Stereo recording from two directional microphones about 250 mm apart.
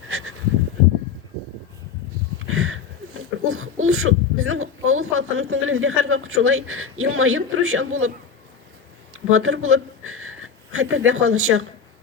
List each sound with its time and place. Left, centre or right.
0.1 s a sound: right
2.5 s speech: right
9.3 s speech: right